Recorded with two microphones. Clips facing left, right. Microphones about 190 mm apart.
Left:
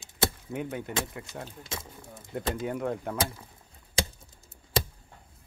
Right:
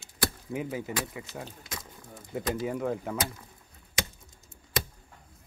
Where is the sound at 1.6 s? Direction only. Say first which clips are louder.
Left 3 dB; 25° left (ahead or behind).